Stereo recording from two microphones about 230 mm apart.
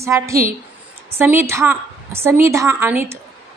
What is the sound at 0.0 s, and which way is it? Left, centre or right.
A woman's voice, centre.